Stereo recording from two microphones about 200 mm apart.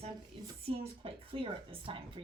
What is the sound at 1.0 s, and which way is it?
Speech, 25° right (ahead or behind).